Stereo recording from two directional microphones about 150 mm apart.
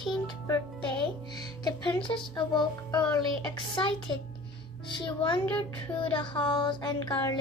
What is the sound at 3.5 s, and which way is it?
Child singing, 35° left (ahead or behind).